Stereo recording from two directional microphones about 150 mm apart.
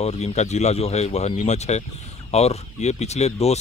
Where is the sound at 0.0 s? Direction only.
45° left (ahead or behind).